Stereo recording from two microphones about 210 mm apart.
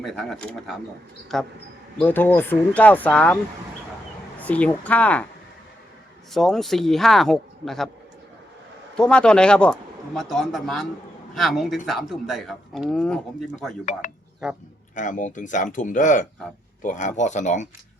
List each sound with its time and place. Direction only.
0.0 s speech: centre (ahead or behind)
4.4 s speech: 5° left (ahead or behind)
6.3 s speech: centre (ahead or behind)
9.0 s speech: 5° left (ahead or behind)
14.4 s speech: 5° right (ahead or behind)
14.9 s speech: 35° left (ahead or behind)